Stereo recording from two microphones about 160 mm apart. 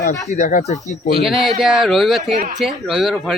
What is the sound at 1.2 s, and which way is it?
Speech, centre (ahead or behind).